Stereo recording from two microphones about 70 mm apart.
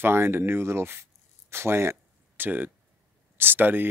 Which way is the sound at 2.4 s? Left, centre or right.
Right.